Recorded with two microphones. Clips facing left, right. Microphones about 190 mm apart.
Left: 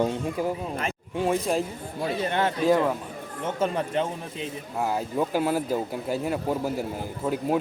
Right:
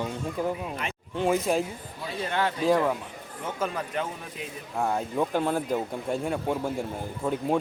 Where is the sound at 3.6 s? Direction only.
25° left (ahead or behind).